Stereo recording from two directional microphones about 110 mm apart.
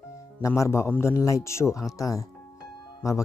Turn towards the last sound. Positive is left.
turn(degrees=30)  # may be behind; listen again after turning